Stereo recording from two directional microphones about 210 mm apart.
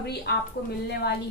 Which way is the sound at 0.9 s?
50° left (ahead or behind).